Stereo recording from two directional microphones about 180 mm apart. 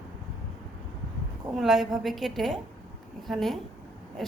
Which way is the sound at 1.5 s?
Centre (ahead or behind).